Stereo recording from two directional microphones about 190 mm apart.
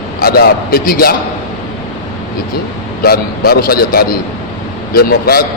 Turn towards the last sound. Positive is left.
turn(degrees=55)  # may be behind; listen again after turning